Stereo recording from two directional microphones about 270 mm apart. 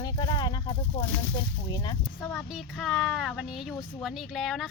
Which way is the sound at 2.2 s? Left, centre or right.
Centre.